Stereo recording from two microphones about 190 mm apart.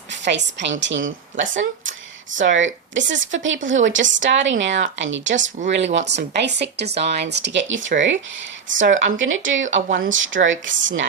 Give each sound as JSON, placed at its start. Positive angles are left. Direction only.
{"t": 0.1, "sound": "a woman's voice", "side_deg": -70}
{"t": 6.3, "sound": "speech", "side_deg": -60}
{"t": 9.1, "sound": "speech", "side_deg": -90}